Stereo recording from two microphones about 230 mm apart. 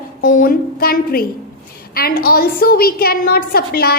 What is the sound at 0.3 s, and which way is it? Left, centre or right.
A woman's voice, left.